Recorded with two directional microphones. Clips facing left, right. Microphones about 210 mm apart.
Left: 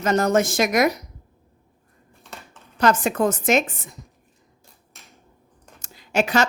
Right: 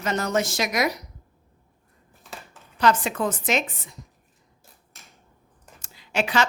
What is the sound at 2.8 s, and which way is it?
A woman's voice, 45° left (ahead or behind).